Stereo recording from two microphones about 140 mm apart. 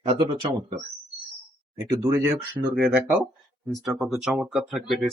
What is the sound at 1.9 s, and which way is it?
Speech, 20° right (ahead or behind).